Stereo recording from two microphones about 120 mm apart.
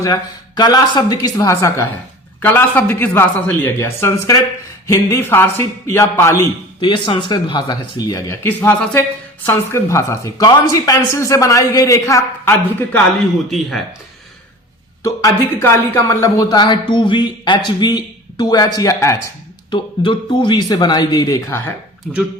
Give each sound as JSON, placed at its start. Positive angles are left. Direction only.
{"t": 0.0, "sound": "speech", "side_deg": 30}
{"t": 6.7, "sound": "speech", "side_deg": 40}
{"t": 8.4, "sound": "speech", "side_deg": 15}
{"t": 13.5, "sound": "speech", "side_deg": 0}
{"t": 15.0, "sound": "speech", "side_deg": 25}
{"t": 19.7, "sound": "speech", "side_deg": 45}